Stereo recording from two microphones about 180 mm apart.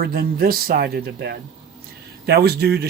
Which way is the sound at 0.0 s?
55° right (ahead or behind).